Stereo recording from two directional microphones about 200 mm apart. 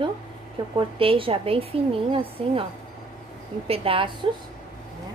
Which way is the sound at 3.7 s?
25° right (ahead or behind).